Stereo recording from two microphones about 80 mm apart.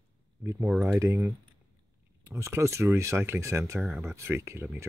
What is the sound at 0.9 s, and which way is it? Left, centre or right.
Speech, right.